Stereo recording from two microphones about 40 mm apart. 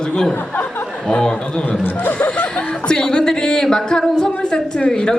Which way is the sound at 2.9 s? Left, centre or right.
Centre.